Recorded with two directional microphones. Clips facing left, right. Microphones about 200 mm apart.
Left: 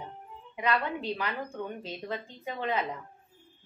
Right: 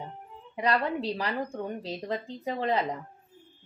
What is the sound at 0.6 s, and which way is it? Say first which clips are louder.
A woman's voice: right 3 dB; 35° right (ahead or behind).